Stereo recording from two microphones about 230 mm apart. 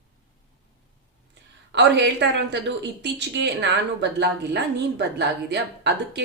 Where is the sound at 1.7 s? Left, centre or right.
Right.